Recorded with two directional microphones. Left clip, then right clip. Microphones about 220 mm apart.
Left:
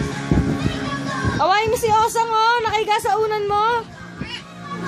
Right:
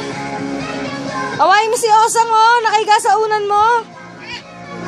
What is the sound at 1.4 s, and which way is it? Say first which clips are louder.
A woman's voice: right 6 dB; 15° right (ahead or behind).